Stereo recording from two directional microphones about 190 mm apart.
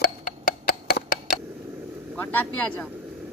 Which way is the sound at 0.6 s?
50° left (ahead or behind).